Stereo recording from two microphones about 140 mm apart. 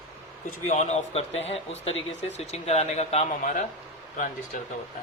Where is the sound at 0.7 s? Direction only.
55° left (ahead or behind).